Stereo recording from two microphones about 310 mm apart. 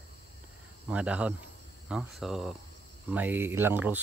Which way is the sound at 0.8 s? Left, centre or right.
Centre.